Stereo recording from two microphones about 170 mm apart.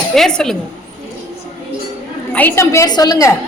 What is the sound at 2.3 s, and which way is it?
A woman's voice, 10° left (ahead or behind).